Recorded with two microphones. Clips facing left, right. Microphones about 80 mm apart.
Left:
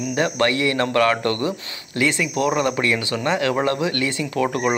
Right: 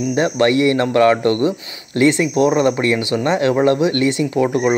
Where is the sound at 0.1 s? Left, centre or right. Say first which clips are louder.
Right 5 dB; right.